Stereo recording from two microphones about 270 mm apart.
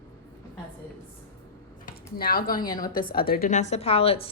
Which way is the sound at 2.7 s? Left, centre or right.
Centre.